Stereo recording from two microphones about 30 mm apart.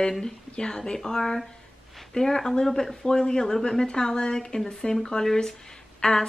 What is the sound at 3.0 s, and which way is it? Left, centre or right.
A woman's voice, left.